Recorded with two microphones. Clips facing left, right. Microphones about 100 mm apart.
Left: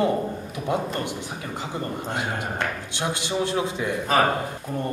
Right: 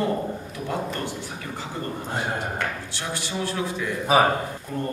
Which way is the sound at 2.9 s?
20° left (ahead or behind).